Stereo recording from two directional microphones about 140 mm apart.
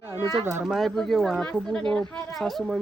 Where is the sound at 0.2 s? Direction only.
25° left (ahead or behind).